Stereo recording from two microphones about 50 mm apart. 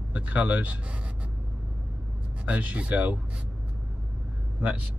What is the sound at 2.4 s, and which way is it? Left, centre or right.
Speech, right.